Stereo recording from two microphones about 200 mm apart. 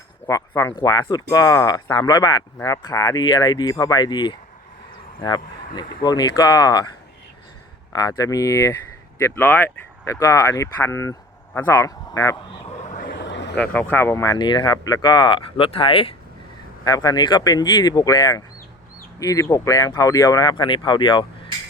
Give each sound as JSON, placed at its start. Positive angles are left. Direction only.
{"t": 0.3, "sound": "speech", "side_deg": 15}
{"t": 8.2, "sound": "speech", "side_deg": 15}
{"t": 12.9, "sound": "vehicle", "side_deg": 40}
{"t": 13.1, "sound": "vehicle", "side_deg": 60}
{"t": 13.9, "sound": "speech", "side_deg": 10}